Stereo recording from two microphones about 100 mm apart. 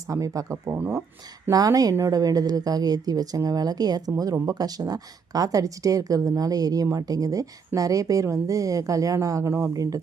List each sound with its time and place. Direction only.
0.1 s a woman's voice: 30° right (ahead or behind)